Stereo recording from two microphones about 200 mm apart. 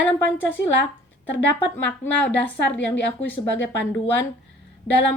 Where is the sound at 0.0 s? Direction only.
5° left (ahead or behind).